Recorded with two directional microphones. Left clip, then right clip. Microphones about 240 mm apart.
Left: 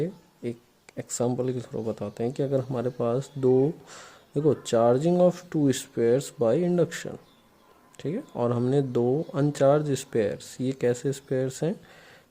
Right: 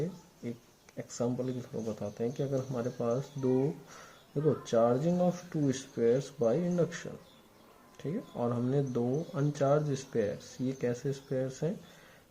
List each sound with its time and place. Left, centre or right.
0.9 s speech: left